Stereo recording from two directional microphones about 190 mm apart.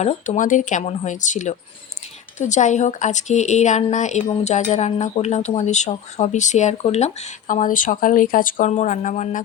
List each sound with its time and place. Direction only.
0.0 s speech: 40° left (ahead or behind)